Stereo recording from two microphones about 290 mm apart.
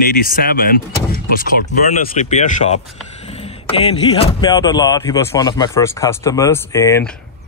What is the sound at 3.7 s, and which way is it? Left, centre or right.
Speech, centre.